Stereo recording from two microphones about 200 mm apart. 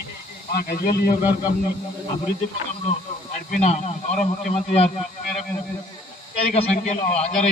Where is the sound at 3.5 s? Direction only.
35° left (ahead or behind).